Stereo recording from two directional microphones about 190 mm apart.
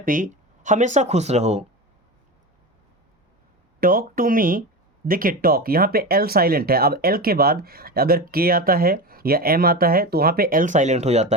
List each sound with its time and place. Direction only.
0.0 s speech: 45° right (ahead or behind)
3.8 s speech: 50° right (ahead or behind)